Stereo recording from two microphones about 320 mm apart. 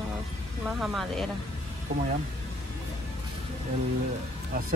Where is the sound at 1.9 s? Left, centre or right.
Right.